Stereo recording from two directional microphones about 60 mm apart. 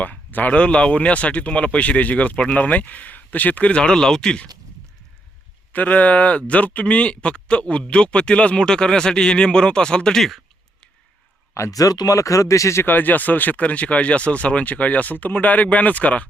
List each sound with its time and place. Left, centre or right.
0.0 s speech: left; by 4.4 s centre
5.7 s speech: left; by 10.4 s centre
11.7 s speech: left
12.8 s speech: left